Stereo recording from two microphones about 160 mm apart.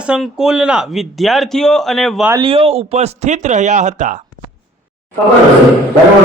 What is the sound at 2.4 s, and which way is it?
Speech, 35° right (ahead or behind).